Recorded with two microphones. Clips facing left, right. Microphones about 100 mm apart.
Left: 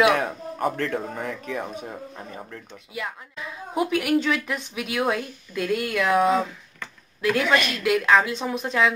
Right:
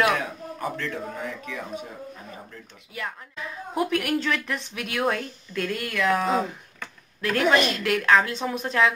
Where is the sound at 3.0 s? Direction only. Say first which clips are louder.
Left 1 dB; centre (ahead or behind).